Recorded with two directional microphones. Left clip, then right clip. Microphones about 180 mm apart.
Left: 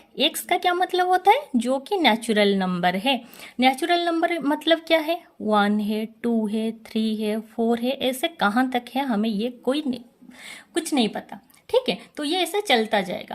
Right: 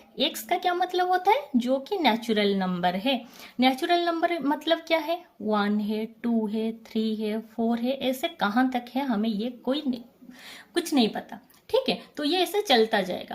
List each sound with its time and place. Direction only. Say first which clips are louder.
0.2 s speech: left 4 dB; 35° left (ahead or behind)